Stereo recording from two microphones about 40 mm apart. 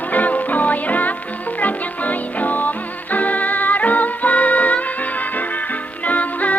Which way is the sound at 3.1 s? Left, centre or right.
Left.